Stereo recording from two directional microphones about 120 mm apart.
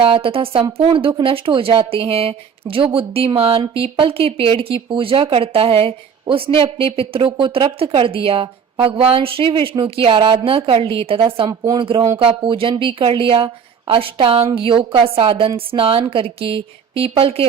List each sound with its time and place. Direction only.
0.0 s speech: 50° right (ahead or behind)